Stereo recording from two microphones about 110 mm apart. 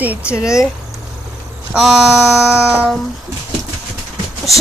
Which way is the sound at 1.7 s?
5° right (ahead or behind).